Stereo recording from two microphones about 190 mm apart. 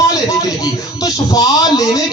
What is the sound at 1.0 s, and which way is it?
A man's voice, 20° left (ahead or behind).